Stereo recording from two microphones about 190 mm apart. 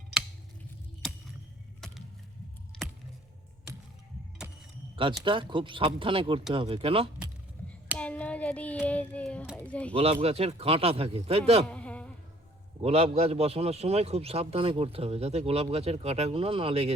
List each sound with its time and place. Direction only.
1.8 s a sound: centre (ahead or behind)
5.2 s speech: 25° right (ahead or behind)
7.9 s child singing: 5° left (ahead or behind)
9.9 s a man's voice: 30° right (ahead or behind)
11.7 s a sound: 5° left (ahead or behind)
12.8 s a man's voice: 35° right (ahead or behind)